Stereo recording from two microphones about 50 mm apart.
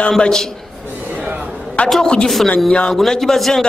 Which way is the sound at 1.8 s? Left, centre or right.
Centre.